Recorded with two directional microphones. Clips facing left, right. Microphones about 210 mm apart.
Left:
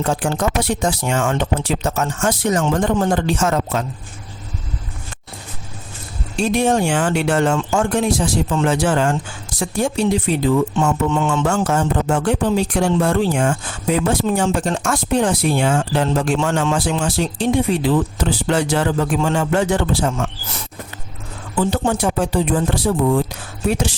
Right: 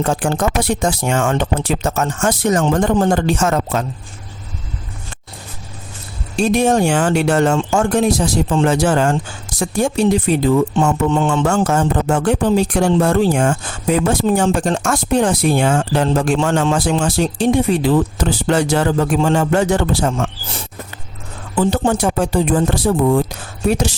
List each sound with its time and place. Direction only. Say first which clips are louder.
0.0 s speech: right 2 dB; 45° right (ahead or behind)
6.3 s speech: right 3 dB; 40° right (ahead or behind)
11.6 s speech: right 2 dB; 45° right (ahead or behind)
21.5 s speech: right 3 dB; 45° right (ahead or behind)